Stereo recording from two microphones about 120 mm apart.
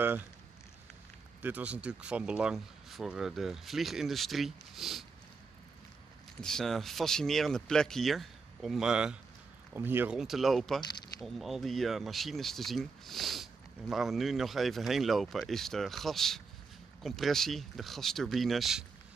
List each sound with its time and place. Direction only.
1.4 s speech: 15° right (ahead or behind)
6.4 s speech: 5° left (ahead or behind)
9.8 s speech: 15° right (ahead or behind)
10.1 s speech: centre (ahead or behind)